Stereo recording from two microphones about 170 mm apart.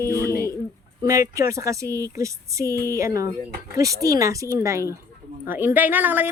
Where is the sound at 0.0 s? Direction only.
15° left (ahead or behind).